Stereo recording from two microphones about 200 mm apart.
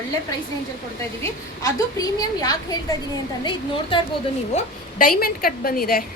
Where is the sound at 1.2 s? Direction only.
15° left (ahead or behind).